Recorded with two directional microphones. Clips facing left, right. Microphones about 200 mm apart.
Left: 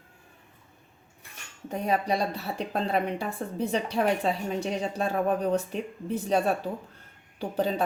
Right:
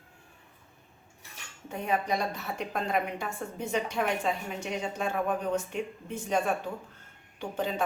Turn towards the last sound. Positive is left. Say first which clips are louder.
# left 4 dB
turn(degrees=35)  # may be behind; listen again after turning